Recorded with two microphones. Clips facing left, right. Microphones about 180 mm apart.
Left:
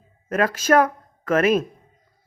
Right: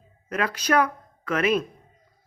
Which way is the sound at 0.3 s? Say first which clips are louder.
Left 6 dB; 45° left (ahead or behind).